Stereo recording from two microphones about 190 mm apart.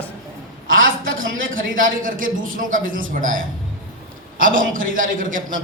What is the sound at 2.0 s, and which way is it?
A man's voice, 45° right (ahead or behind).